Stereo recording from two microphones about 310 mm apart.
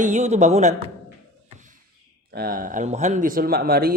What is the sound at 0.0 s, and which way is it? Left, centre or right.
Speech, right.